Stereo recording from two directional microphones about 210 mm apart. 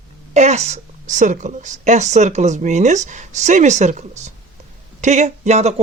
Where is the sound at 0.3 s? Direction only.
30° right (ahead or behind).